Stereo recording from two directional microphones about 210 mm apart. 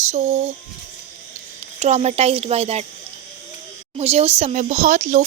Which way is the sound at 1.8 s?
30° right (ahead or behind).